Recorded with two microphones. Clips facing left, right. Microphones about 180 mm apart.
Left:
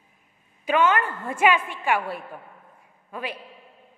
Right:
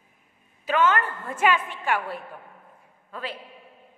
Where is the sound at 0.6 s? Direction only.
10° left (ahead or behind).